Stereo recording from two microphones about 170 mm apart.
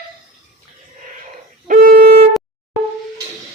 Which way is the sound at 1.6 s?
55° right (ahead or behind).